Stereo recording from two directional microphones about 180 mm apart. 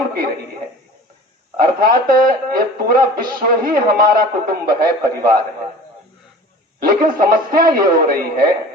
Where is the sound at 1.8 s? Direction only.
55° right (ahead or behind).